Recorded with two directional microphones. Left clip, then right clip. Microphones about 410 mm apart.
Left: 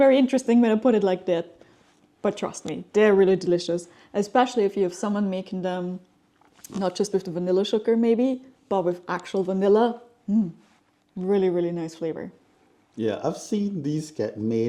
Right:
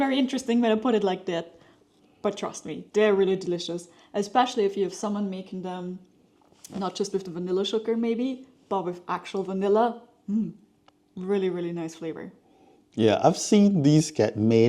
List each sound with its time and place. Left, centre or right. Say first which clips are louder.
0.0 s speech: left 8 dB; centre; by 5.8 s left
6.6 s speech: left 4 dB; centre
13.0 s speech: right 6 dB; right